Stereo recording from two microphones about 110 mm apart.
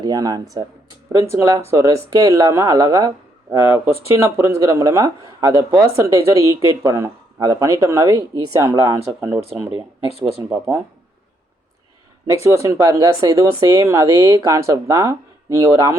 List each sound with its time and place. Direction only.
0.0 s speech: 35° right (ahead or behind)
3.5 s speech: 25° right (ahead or behind)
12.3 s speech: 25° right (ahead or behind)